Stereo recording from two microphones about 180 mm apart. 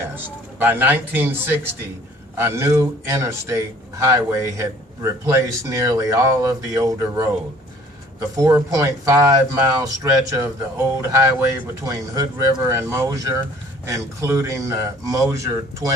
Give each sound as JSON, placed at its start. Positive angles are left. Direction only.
{"t": 0.6, "sound": "a man's voice", "side_deg": -10}